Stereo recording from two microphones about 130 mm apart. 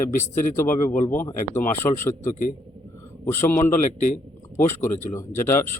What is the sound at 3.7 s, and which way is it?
Speech, 75° left (ahead or behind).